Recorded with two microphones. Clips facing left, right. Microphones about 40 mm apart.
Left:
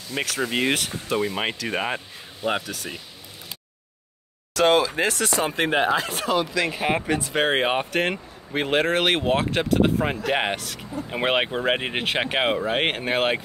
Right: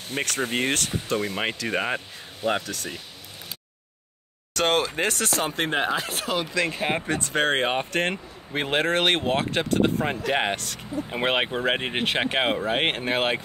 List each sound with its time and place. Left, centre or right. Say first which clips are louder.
0.1 s speech: left 1 dB; right
0.5 s speech: left 4 dB; left
0.7 s speech: left 1 dB; centre
4.6 s speech: left 4 dB; centre
5.3 s speech: left 3 dB; centre